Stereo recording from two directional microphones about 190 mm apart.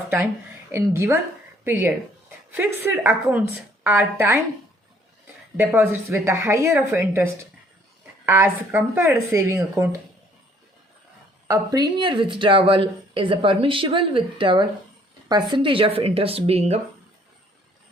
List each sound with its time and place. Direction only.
0.7 s speech: 15° right (ahead or behind)
5.5 s speech: 10° right (ahead or behind)
8.3 s speech: 10° right (ahead or behind)
11.4 s speech: 15° right (ahead or behind); by 16.8 s 35° right (ahead or behind)